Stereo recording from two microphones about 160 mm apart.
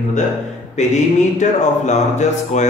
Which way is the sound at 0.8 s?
45° left (ahead or behind).